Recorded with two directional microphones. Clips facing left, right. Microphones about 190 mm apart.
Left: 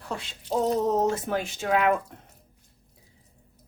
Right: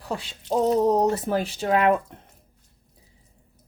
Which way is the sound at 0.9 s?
35° right (ahead or behind).